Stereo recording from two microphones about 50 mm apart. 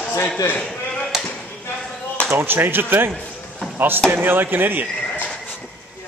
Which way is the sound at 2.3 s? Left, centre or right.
Right.